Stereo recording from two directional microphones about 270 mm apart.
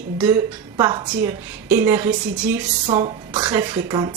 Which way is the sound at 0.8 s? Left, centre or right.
Centre.